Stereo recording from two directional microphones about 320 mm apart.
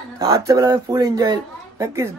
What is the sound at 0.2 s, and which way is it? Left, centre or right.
A child's voice, centre.